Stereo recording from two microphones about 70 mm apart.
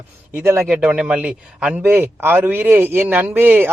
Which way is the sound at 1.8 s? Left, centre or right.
Right.